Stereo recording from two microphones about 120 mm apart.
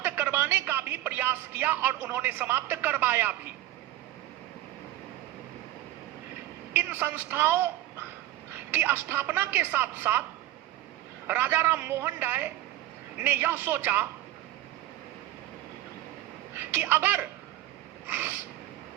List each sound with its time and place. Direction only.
0.0 s speech: 15° right (ahead or behind)
6.7 s speech: 15° right (ahead or behind)
8.7 s speech: 15° right (ahead or behind)
11.3 s speech: 15° right (ahead or behind)
16.6 s speech: 15° right (ahead or behind)